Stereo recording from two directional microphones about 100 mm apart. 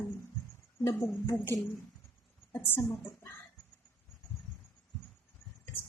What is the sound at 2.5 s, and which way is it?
Speech, 25° left (ahead or behind).